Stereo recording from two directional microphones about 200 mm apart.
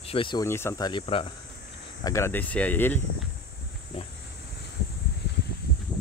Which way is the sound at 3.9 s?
30° left (ahead or behind).